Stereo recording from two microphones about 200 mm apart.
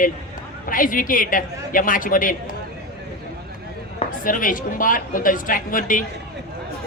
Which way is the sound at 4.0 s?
40° left (ahead or behind).